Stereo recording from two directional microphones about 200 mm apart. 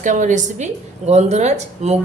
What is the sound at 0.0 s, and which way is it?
A man's voice, 40° right (ahead or behind).